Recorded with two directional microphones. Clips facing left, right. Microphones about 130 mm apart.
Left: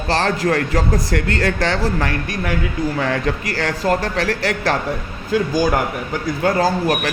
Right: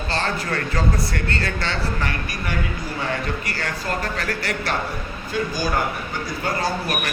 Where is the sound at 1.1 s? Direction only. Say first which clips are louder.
Left 7 dB; 90° left.